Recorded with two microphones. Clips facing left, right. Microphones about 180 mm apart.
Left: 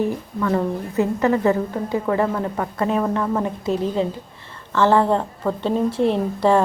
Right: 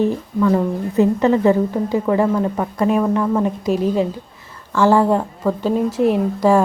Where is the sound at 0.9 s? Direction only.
20° right (ahead or behind).